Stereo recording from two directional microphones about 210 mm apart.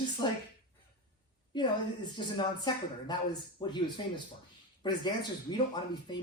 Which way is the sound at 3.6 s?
20° left (ahead or behind).